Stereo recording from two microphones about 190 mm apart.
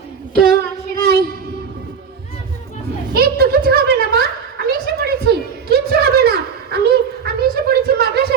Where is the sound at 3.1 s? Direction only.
55° right (ahead or behind).